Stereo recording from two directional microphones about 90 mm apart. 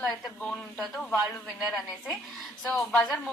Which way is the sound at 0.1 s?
10° left (ahead or behind).